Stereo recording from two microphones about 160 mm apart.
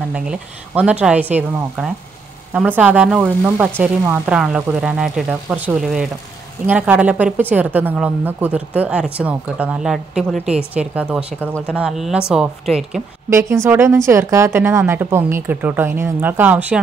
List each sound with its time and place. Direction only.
0.1 s a woman's voice: 5° right (ahead or behind)
13.3 s a woman's voice: 20° right (ahead or behind)